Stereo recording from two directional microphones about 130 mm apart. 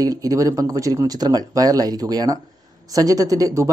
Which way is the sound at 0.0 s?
25° right (ahead or behind).